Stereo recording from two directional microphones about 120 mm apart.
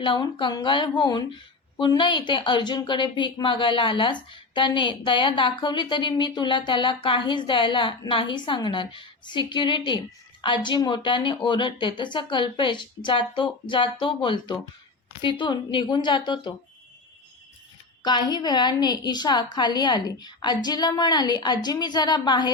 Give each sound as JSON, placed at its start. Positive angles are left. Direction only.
{"t": 0.0, "sound": "a woman's voice", "side_deg": 40}
{"t": 18.0, "sound": "a woman's voice", "side_deg": 40}